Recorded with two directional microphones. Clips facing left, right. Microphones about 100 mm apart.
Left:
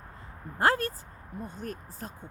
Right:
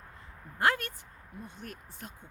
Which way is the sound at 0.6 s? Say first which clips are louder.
Left 3 dB; 35° left (ahead or behind).